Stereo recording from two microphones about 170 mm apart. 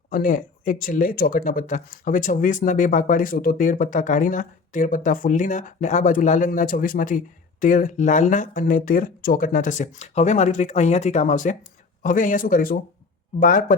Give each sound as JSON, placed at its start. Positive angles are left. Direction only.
{"t": 0.1, "sound": "speech", "side_deg": 55}